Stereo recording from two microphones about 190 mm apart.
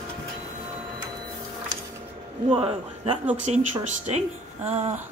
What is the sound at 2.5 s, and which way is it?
A man's voice, 30° right (ahead or behind).